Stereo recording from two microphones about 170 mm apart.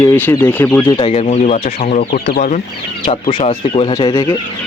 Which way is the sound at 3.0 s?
30° left (ahead or behind).